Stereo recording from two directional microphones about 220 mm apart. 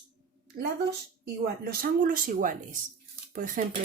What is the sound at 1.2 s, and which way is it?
Speech, 40° right (ahead or behind).